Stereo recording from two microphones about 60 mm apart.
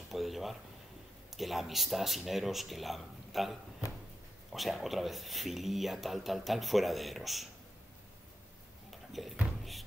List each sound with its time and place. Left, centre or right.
0.1 s a sound: centre
1.3 s speech: centre
9.2 s speech: centre